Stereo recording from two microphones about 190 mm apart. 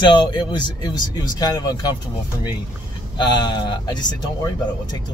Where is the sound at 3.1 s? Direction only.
25° left (ahead or behind).